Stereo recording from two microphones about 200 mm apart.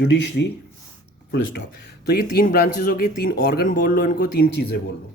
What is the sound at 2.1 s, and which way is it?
Speech, 50° left (ahead or behind).